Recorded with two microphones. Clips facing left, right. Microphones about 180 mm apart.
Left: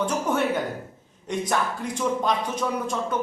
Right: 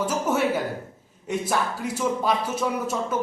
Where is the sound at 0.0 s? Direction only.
5° right (ahead or behind).